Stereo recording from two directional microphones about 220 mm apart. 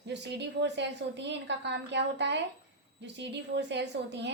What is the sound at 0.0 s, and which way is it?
A woman's voice, 50° right (ahead or behind).